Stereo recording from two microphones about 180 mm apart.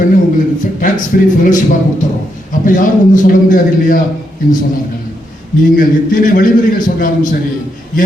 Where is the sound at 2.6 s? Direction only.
50° left (ahead or behind).